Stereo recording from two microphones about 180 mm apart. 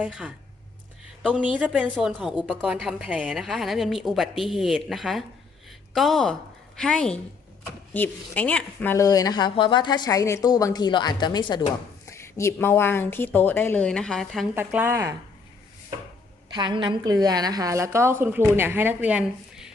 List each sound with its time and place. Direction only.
0.0 s a woman's voice: 5° right (ahead or behind)
14.5 s a woman's voice: 10° right (ahead or behind)
16.5 s a woman's voice: 25° right (ahead or behind); by 19.7 s 5° right (ahead or behind)